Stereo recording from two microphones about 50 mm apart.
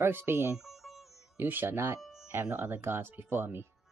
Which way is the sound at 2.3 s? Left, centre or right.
Right.